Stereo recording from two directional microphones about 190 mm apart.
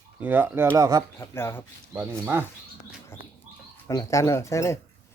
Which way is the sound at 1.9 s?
10° right (ahead or behind).